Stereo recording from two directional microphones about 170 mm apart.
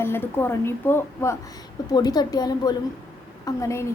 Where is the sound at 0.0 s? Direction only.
15° left (ahead or behind).